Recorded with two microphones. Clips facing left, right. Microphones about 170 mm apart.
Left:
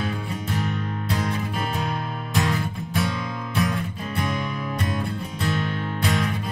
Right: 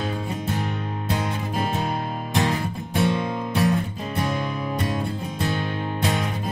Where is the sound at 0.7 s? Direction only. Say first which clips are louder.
Even; 30° right (ahead or behind).